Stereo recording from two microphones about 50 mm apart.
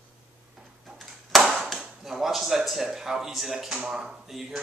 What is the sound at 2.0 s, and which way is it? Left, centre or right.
Speech, centre.